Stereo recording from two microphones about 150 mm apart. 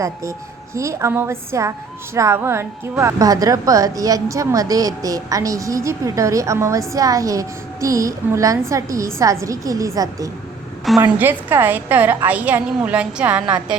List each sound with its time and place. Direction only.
0.0 s a woman's voice: 20° right (ahead or behind)
10.9 s a woman's voice: centre (ahead or behind)
11.2 s a woman's voice: 15° right (ahead or behind)